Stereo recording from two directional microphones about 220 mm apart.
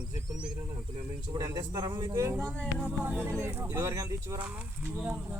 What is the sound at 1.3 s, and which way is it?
Speech, 15° right (ahead or behind).